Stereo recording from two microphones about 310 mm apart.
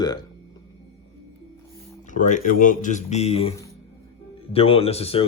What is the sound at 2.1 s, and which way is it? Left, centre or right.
Speech, left.